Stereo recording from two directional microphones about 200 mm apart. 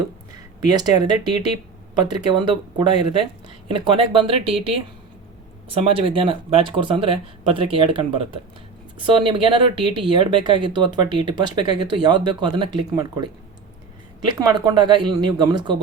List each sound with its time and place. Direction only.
0.7 s speech: 20° right (ahead or behind)
14.3 s speech: 20° right (ahead or behind)